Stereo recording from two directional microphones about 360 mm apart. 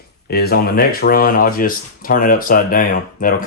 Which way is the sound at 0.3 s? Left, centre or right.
Left.